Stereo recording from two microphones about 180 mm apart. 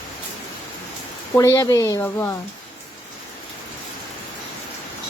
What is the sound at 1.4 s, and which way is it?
Speech, 20° left (ahead or behind).